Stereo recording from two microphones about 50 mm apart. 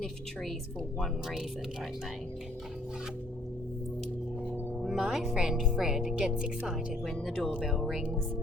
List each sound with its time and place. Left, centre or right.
0.9 s speech: centre
4.8 s speech: centre
6.1 s speech: centre
6.7 s speech: centre
7.5 s speech: centre